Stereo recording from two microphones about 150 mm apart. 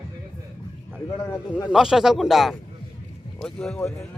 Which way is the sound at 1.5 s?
10° left (ahead or behind).